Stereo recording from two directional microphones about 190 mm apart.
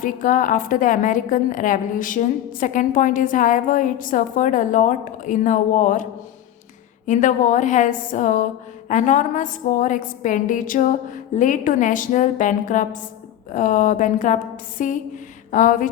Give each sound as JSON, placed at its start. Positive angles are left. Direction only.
{"t": 0.0, "sound": "a woman's voice", "side_deg": 45}